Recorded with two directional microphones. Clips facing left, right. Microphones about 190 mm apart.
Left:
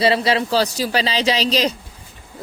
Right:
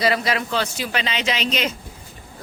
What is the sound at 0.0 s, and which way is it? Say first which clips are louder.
A woman's voice: left 4 dB; 30° left (ahead or behind).